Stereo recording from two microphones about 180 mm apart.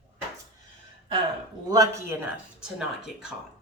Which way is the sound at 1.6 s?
20° right (ahead or behind).